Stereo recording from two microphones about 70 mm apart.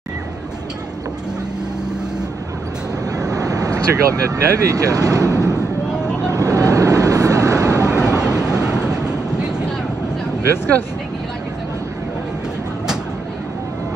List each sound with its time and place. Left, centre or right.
3.2 s speech: right
6.3 s vehicle: right
7.9 s vehicle: centre